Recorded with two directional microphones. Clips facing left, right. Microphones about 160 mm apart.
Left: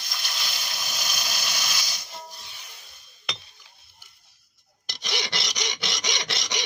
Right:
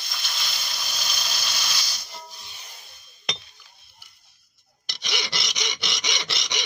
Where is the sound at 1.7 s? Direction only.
15° left (ahead or behind).